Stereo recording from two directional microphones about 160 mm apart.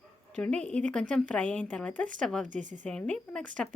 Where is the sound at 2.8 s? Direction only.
5° left (ahead or behind).